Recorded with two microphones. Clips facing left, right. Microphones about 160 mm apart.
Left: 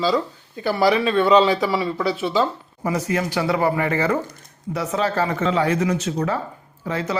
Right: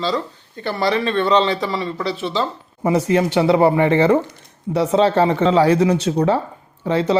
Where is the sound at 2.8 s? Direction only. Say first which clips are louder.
Right 6 dB; 30° right (ahead or behind).